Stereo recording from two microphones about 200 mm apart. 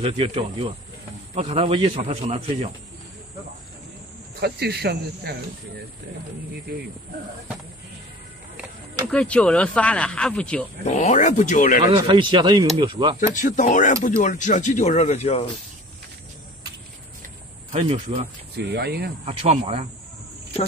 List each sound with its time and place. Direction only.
0.0 s a man's voice: 30° right (ahead or behind)
4.4 s speech: 55° right (ahead or behind)
9.1 s speech: 5° left (ahead or behind)
10.9 s speech: 35° left (ahead or behind)
11.8 s a man's voice: 25° right (ahead or behind)
13.2 s speech: 40° left (ahead or behind)
17.6 s a man's voice: 30° right (ahead or behind)
18.7 s speech: 55° right (ahead or behind)
19.2 s speech: 30° right (ahead or behind)